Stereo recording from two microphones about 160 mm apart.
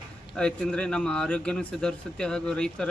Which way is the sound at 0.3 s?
5° left (ahead or behind).